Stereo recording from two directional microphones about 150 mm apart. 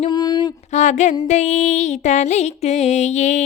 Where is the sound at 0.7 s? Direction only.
50° left (ahead or behind).